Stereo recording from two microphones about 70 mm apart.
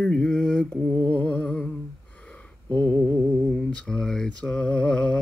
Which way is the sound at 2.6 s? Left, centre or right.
Left.